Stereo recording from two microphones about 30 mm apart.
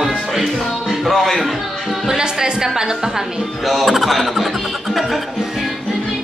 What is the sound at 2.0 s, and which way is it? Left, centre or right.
A woman's voice, right.